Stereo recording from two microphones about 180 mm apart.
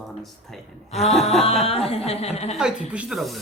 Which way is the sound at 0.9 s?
35° left (ahead or behind).